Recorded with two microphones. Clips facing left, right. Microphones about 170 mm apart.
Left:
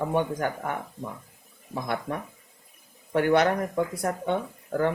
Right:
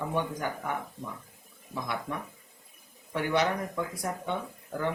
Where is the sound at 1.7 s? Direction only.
55° left (ahead or behind).